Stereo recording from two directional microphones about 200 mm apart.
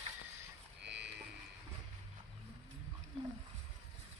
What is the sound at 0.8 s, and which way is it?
Livestock, 60° right (ahead or behind).